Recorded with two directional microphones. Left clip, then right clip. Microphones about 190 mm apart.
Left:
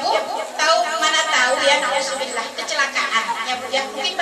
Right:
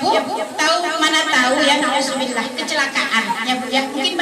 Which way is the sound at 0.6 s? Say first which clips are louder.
Even; 40° right (ahead or behind).